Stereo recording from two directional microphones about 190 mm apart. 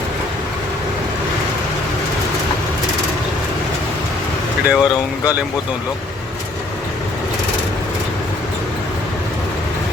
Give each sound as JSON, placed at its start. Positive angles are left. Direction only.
{"t": 4.6, "sound": "speech", "side_deg": -5}